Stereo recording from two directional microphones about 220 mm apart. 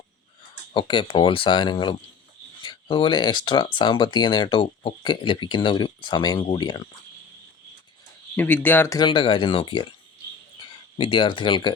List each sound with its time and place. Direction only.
0.7 s speech: 20° left (ahead or behind)
8.4 s speech: 10° left (ahead or behind)
10.9 s speech: 25° left (ahead or behind)